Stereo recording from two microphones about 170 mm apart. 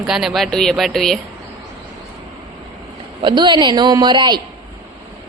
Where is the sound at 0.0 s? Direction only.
Centre (ahead or behind).